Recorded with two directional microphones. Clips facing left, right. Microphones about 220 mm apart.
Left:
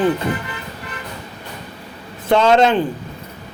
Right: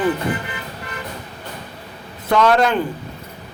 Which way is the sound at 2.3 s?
25° left (ahead or behind).